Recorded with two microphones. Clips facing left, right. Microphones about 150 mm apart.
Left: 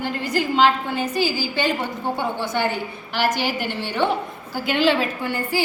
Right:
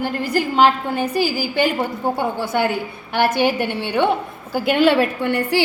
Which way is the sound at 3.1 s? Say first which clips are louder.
Right 5 dB; 60° right (ahead or behind).